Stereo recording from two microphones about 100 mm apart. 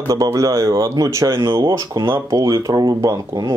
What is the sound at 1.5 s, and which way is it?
Speech, 55° right (ahead or behind).